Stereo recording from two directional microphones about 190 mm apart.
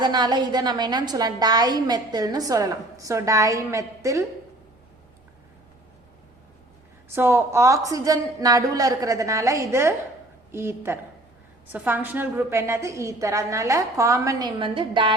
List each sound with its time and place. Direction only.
0.0 s a woman's voice: 20° right (ahead or behind)
7.1 s a woman's voice: 15° right (ahead or behind)